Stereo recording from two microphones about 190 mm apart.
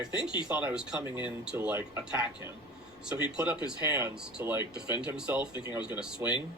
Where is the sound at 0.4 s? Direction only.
5° right (ahead or behind).